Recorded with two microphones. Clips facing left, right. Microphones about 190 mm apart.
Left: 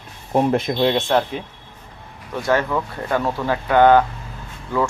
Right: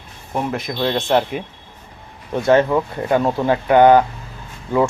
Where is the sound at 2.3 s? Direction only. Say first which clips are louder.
Right 5 dB; 20° right (ahead or behind).